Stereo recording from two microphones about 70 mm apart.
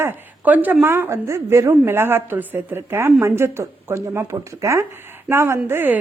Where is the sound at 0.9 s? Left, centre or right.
Right.